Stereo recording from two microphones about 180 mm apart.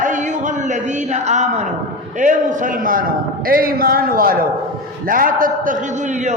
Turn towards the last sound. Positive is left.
turn(degrees=-40)  # may be behind; listen again after turning